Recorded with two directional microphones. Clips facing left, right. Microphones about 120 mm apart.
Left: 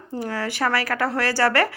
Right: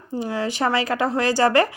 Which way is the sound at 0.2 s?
20° right (ahead or behind).